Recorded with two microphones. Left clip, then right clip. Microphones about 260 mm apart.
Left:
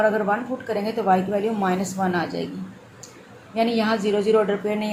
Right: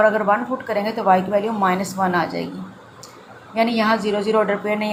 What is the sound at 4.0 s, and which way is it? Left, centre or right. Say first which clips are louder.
Speech: even; right.